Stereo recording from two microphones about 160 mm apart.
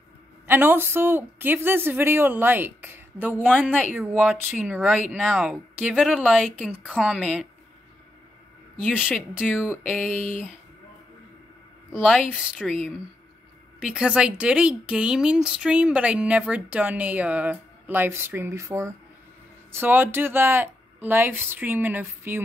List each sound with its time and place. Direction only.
0.5 s speech: 10° right (ahead or behind)
9.4 s speech: 5° right (ahead or behind)
10.0 s a sound: 45° right (ahead or behind)
11.9 s speech: centre (ahead or behind)